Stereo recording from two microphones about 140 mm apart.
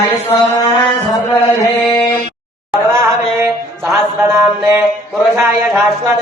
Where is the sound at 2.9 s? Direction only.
20° right (ahead or behind).